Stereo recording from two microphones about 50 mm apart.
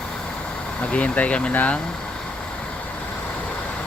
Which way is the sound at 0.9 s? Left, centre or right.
Left.